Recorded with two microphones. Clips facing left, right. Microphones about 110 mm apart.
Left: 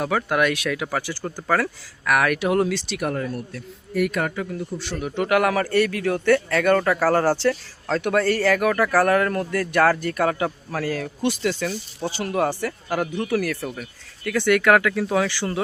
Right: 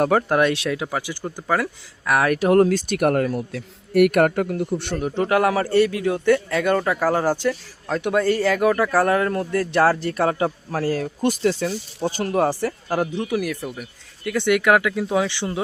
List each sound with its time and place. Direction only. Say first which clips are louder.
0.0 s a man's voice: right 4 dB; 40° right (ahead or behind); by 2.1 s 15° right (ahead or behind)
2.1 s a man's voice: right 4 dB; 30° right (ahead or behind); by 4.6 s 60° right (ahead or behind)
4.9 s a man's voice: even; 35° right (ahead or behind)
11.6 s a man's voice: right 3 dB; 25° right (ahead or behind)
12.1 s speech: right 2 dB; 35° right (ahead or behind)
13.2 s a man's voice: left 1 dB; 15° right (ahead or behind)